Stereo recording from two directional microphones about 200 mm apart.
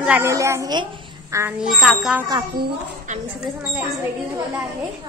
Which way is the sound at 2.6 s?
40° right (ahead or behind).